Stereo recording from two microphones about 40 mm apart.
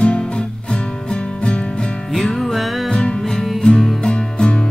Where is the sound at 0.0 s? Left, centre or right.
Left.